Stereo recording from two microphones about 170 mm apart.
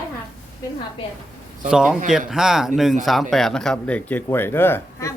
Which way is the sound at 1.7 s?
5° right (ahead or behind).